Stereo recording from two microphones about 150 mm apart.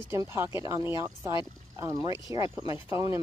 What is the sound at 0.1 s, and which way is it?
Speech, 20° right (ahead or behind).